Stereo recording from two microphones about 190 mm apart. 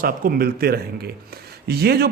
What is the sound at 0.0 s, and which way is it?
A man's voice, 50° right (ahead or behind).